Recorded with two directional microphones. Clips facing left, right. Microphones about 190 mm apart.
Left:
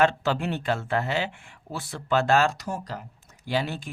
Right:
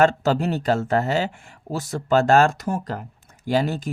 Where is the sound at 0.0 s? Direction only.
45° right (ahead or behind).